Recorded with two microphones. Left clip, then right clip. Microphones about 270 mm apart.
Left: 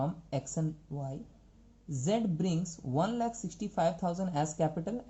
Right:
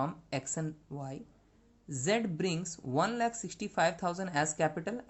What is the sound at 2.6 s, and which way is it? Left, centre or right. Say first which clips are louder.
Speech: right 1 dB; right.